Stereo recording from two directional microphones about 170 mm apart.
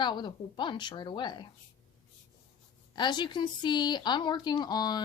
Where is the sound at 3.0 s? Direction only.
25° left (ahead or behind).